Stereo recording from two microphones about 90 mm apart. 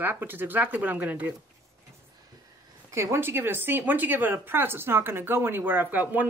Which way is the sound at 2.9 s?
30° right (ahead or behind).